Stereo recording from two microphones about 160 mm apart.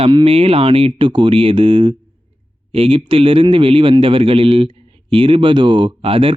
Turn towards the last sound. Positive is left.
turn(degrees=-35)  # may be behind; listen again after turning